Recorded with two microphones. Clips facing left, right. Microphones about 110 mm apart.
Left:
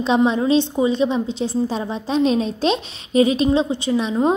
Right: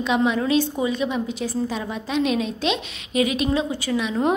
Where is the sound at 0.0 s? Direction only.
30° left (ahead or behind).